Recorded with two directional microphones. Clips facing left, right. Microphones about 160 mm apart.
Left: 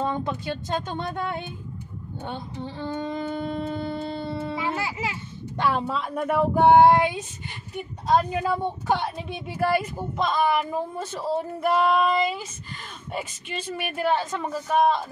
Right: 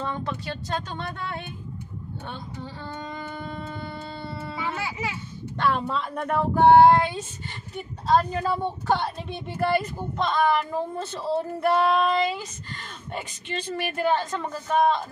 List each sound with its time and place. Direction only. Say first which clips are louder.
0.0 s speech: left 3 dB; 15° left (ahead or behind)
2.2 s a sound: left 6 dB; 20° left (ahead or behind)
5.6 s speech: even; 5° left (ahead or behind)
11.6 s speech: even; centre (ahead or behind)